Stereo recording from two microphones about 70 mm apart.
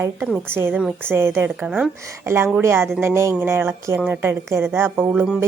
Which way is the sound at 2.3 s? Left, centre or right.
Right.